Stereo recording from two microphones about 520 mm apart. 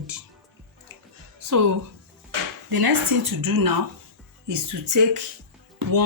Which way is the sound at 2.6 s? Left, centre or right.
Right.